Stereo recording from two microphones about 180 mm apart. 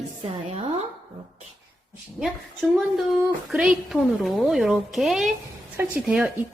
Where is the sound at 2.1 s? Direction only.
Centre (ahead or behind).